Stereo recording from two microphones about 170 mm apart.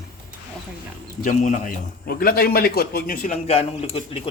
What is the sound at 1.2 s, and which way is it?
A man's voice, 50° left (ahead or behind).